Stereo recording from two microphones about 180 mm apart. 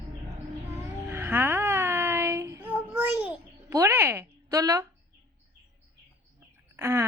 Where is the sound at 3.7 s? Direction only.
15° right (ahead or behind).